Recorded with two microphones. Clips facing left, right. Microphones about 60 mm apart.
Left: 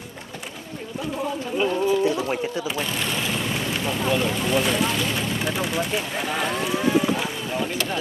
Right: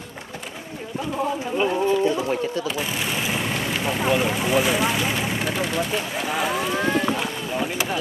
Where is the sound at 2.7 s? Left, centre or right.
Centre.